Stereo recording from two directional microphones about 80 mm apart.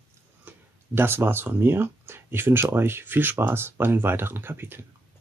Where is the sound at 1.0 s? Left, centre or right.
Right.